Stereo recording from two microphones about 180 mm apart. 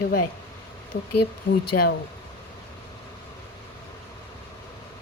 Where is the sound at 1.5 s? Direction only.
90° left.